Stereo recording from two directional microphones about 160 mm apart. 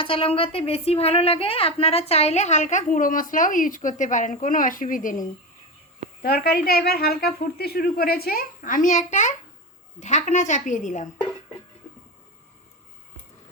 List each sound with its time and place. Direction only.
0.0 s a woman's voice: 35° left (ahead or behind); by 5.2 s 55° left (ahead or behind)
6.2 s a woman's voice: 75° left (ahead or behind); by 11.3 s 50° left (ahead or behind)